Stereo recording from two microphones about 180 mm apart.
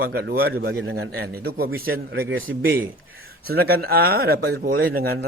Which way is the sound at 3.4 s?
60° right (ahead or behind).